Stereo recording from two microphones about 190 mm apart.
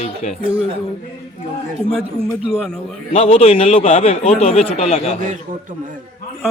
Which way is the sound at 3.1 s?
35° left (ahead or behind).